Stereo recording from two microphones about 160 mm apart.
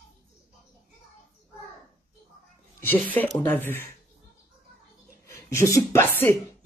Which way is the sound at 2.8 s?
10° left (ahead or behind).